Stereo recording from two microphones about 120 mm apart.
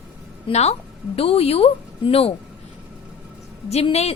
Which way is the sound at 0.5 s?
60° left (ahead or behind).